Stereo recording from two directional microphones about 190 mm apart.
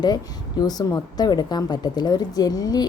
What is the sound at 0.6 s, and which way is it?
A woman's voice, 20° left (ahead or behind).